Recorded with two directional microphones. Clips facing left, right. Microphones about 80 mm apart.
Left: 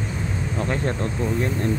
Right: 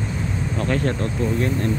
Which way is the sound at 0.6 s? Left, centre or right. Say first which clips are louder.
Right 3 dB; centre.